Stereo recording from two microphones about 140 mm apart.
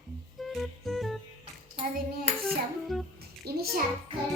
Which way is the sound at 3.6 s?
90° right.